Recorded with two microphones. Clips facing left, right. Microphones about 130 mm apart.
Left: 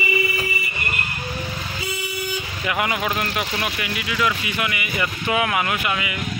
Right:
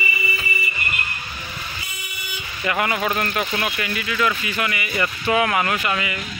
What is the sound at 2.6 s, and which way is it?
Speech, 15° left (ahead or behind).